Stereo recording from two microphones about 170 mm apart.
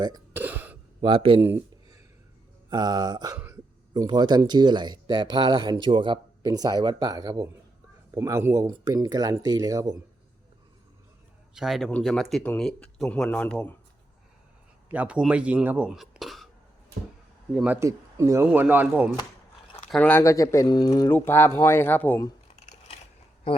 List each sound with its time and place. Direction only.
0.3 s throat clearing: 10° right (ahead or behind)
1.0 s speech: 30° right (ahead or behind)
1.4 s a sound: 15° right (ahead or behind)
2.6 s speech: 25° right (ahead or behind)
11.5 s speech: centre (ahead or behind)
14.8 s speech: 10° right (ahead or behind)
17.5 s speech: 10° right (ahead or behind)
19.9 s speech: 10° left (ahead or behind)